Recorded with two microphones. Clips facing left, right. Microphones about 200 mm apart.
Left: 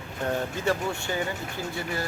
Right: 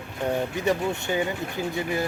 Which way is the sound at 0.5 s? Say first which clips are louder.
Right 3 dB; 20° right (ahead or behind).